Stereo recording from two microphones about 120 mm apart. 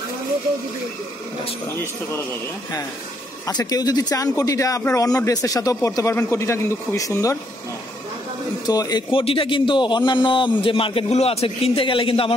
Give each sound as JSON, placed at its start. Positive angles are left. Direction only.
{"t": 3.4, "sound": "speech", "side_deg": 30}
{"t": 8.6, "sound": "speech", "side_deg": 35}
{"t": 9.1, "sound": "a man's voice", "side_deg": 50}